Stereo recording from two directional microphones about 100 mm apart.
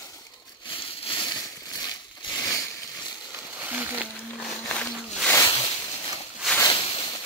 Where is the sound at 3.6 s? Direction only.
20° right (ahead or behind).